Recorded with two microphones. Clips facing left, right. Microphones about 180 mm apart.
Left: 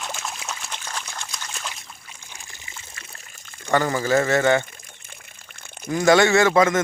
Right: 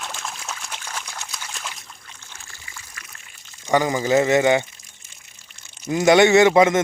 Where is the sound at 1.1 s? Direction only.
5° right (ahead or behind).